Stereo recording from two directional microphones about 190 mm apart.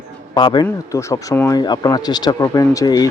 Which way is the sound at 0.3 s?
25° left (ahead or behind).